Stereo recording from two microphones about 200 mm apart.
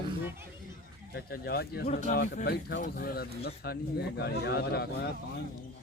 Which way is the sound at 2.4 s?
55° left (ahead or behind).